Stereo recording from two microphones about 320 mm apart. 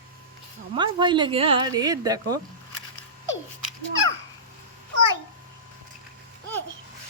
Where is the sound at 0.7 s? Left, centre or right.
Centre.